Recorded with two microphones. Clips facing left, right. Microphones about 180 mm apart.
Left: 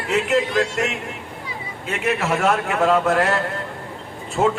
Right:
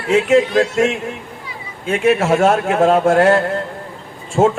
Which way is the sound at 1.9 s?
50° right (ahead or behind).